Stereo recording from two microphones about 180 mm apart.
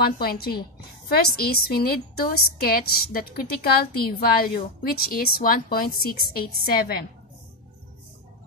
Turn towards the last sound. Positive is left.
turn(degrees=55)  # may be behind; listen again after turning